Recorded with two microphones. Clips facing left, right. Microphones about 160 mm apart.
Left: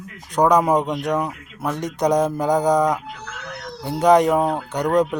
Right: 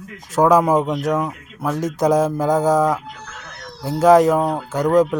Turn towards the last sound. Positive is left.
turn(degrees=0)  # may be behind; listen again after turning